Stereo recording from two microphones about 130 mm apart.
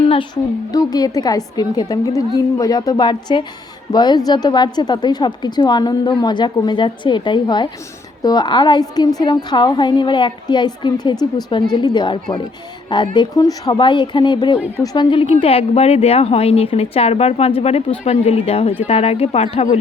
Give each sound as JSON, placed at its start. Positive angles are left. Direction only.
{"t": 0.7, "sound": "a woman's voice", "side_deg": 30}